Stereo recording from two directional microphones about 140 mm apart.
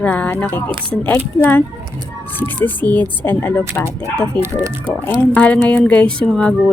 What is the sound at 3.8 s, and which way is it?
Speech, 20° right (ahead or behind).